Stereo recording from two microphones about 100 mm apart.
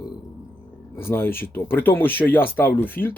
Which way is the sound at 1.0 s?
25° left (ahead or behind).